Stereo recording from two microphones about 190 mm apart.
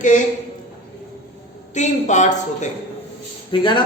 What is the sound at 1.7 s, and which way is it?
Speech, 40° left (ahead or behind).